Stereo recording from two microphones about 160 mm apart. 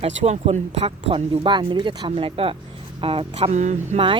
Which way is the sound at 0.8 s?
30° right (ahead or behind).